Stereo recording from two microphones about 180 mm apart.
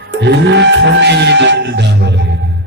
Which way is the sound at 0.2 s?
75° right (ahead or behind).